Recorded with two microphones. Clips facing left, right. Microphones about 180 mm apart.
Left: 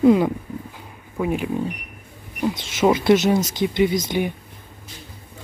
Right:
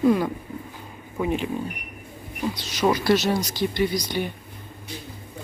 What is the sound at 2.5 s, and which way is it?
Speech, 20° left (ahead or behind).